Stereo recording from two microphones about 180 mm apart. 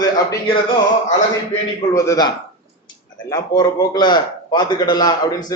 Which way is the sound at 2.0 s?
20° left (ahead or behind).